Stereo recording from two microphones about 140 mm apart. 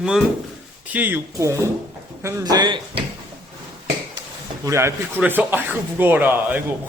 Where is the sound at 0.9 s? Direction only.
15° right (ahead or behind).